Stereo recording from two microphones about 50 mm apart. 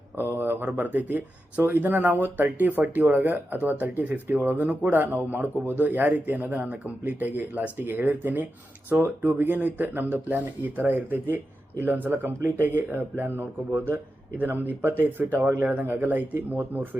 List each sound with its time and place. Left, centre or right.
0.3 s speech: right
0.8 s speech: right